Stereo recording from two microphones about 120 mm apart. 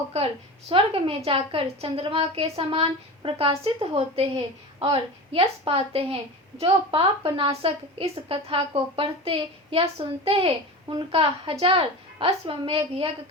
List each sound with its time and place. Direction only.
0.7 s a woman's voice: 50° right (ahead or behind)